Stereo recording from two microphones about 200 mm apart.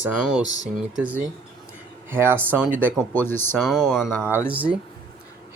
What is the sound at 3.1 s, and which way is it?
Speech, 10° left (ahead or behind).